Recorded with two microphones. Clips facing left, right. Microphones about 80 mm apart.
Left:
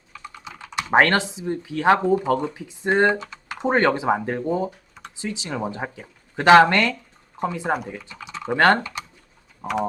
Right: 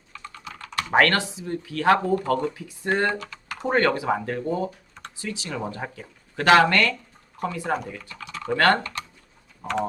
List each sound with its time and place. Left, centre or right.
0.1 s speech: centre
7.7 s speech: centre